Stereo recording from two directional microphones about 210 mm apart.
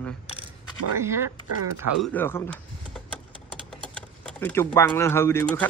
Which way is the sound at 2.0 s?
5° left (ahead or behind).